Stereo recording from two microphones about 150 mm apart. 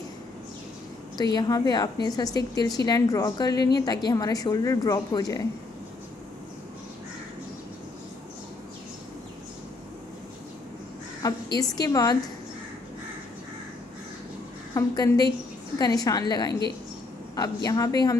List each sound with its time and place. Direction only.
1.1 s a woman's voice: 25° left (ahead or behind)
11.2 s a woman's voice: 25° left (ahead or behind)
14.7 s a woman's voice: 20° left (ahead or behind)
17.6 s a woman's voice: 25° left (ahead or behind)